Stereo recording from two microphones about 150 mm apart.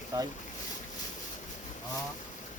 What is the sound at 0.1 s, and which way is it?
Speech, 25° right (ahead or behind).